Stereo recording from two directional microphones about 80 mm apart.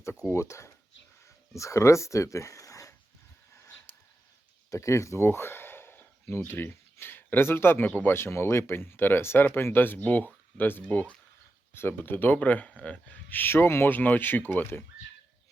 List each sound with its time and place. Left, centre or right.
0.3 s speech: left
3.5 s a sound: left
6.5 s speech: left
11.7 s speech: left